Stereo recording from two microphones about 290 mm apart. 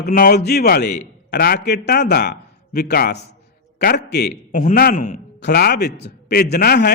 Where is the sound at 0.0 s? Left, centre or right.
Left.